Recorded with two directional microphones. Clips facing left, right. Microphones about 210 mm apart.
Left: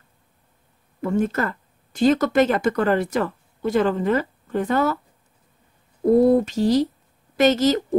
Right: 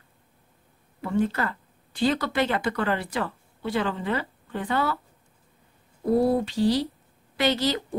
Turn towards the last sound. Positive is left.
turn(degrees=45)  # may be behind; listen again after turning